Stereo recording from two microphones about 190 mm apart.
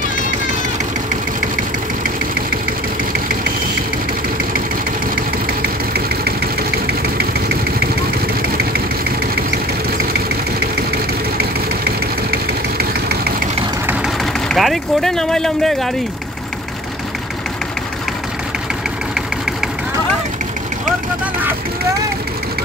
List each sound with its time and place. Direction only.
7.0 s vehicle: 55° right (ahead or behind)
13.8 s vehicle: centre (ahead or behind)